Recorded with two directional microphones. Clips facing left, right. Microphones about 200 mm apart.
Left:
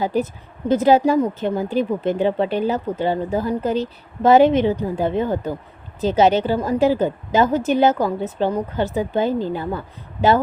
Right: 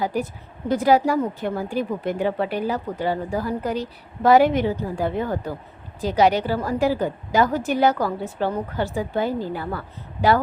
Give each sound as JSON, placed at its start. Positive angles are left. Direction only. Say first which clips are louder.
{"t": 0.0, "sound": "speech", "louder": "left 4 dB", "side_deg": 25}